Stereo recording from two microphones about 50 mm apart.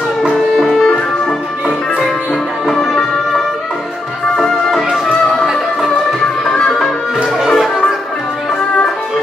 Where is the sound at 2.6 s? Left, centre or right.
Centre.